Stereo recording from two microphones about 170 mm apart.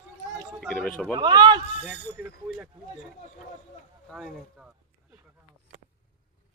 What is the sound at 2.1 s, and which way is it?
Speech, 10° right (ahead or behind).